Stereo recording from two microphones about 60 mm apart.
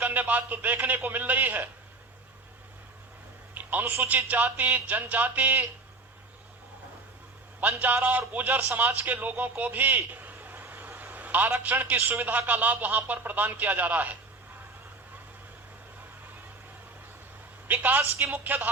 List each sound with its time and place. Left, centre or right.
0.0 s speech: right
3.5 s a sound: right
4.3 s speech: right
7.6 s a man's voice: right
17.7 s speech: right